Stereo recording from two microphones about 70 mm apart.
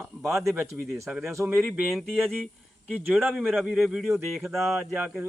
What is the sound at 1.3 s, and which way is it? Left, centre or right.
Speech, right.